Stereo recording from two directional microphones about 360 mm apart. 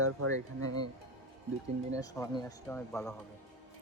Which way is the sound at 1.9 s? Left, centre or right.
Centre.